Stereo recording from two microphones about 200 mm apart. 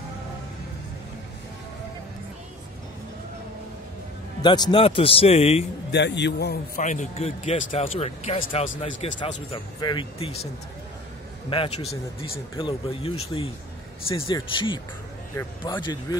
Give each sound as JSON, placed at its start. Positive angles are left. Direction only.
{"t": 4.4, "sound": "speech", "side_deg": 20}
{"t": 5.9, "sound": "a man's voice", "side_deg": 60}
{"t": 6.8, "sound": "speech", "side_deg": 40}
{"t": 11.5, "sound": "speech", "side_deg": 30}